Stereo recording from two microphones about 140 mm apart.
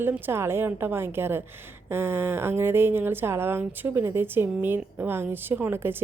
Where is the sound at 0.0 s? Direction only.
15° right (ahead or behind).